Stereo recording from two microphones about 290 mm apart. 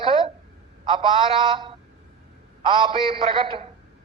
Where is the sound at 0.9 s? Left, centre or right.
Centre.